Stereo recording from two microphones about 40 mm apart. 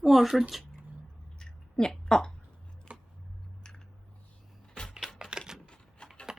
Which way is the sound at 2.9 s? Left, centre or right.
Right.